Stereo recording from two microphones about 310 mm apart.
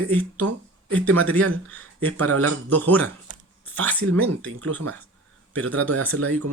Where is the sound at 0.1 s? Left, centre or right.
Centre.